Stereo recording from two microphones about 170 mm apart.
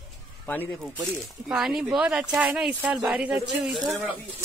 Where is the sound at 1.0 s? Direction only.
Centre (ahead or behind).